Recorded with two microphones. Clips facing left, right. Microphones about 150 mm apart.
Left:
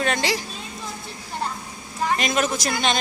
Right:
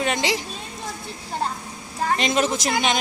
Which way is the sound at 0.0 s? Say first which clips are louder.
Even; 15° right (ahead or behind).